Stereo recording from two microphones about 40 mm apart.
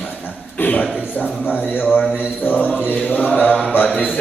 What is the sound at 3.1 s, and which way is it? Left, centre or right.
Mantra, left.